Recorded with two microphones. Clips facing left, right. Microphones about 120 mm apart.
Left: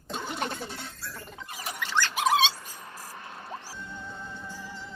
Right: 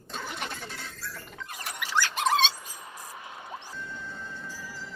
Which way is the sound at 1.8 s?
10° right (ahead or behind).